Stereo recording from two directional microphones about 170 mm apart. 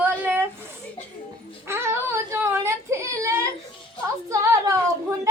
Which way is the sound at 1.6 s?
15° right (ahead or behind).